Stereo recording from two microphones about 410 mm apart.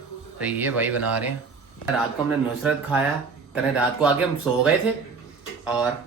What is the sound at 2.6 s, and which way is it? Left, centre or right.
Speech, centre.